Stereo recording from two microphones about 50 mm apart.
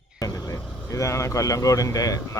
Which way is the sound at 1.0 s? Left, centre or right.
Left.